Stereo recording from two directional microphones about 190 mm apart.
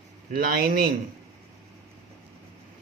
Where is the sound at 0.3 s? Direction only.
50° right (ahead or behind).